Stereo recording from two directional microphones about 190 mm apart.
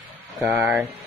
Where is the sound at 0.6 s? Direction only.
5° right (ahead or behind).